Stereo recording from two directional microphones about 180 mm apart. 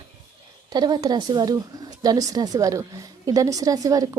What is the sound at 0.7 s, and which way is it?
Speech, 25° right (ahead or behind).